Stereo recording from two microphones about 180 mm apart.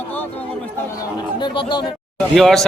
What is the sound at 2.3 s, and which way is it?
Speech, centre (ahead or behind).